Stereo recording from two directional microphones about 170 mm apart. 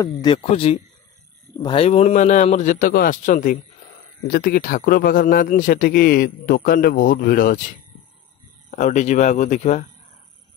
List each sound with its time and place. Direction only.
0.0 s speech: 25° left (ahead or behind)
0.4 s a man's voice: 35° left (ahead or behind)
4.3 s a man's voice: 60° left (ahead or behind)
8.6 s a man's voice: 45° left (ahead or behind)